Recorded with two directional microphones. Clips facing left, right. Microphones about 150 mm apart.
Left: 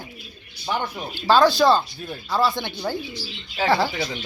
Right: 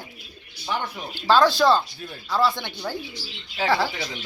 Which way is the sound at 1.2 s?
15° left (ahead or behind).